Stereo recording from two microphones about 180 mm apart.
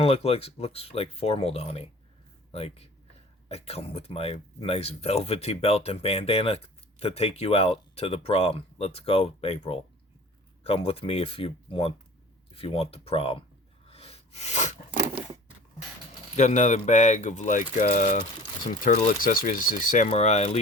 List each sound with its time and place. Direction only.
0.0 s speech: 35° left (ahead or behind)
13.8 s sneeze: 30° left (ahead or behind)
16.3 s speech: 40° left (ahead or behind)